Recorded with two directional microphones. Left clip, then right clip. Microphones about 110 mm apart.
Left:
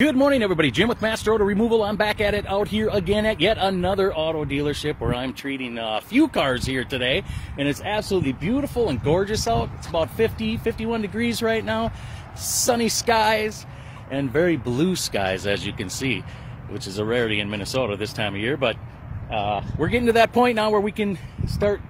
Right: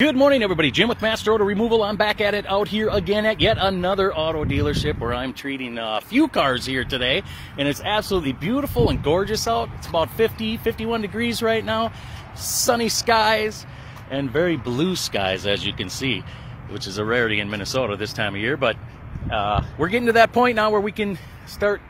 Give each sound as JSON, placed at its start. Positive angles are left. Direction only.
{"t": 0.0, "sound": "speech", "side_deg": 35}